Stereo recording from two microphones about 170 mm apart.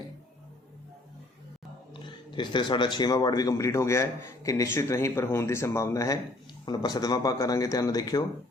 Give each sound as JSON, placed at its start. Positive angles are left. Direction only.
{"t": 1.9, "sound": "speech", "side_deg": 30}